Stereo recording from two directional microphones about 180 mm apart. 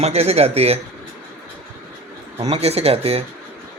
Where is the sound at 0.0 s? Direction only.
35° right (ahead or behind).